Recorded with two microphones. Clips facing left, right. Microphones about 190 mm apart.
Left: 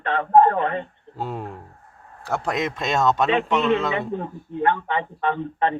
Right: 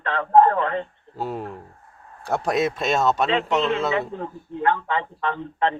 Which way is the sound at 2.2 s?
15° right (ahead or behind).